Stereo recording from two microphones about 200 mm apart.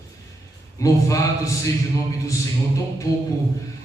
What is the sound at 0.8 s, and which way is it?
Speech, 15° left (ahead or behind).